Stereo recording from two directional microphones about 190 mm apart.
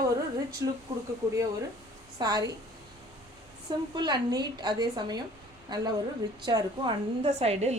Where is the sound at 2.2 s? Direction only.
20° right (ahead or behind).